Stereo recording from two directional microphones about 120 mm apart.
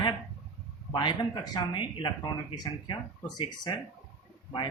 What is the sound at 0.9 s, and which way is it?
Speech, 35° left (ahead or behind).